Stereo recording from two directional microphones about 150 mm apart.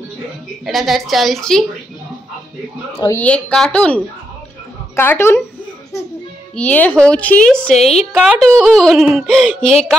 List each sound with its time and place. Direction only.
0.7 s speech: centre (ahead or behind)
3.2 s a woman's voice: 10° left (ahead or behind)
6.5 s a woman's voice: 10° left (ahead or behind)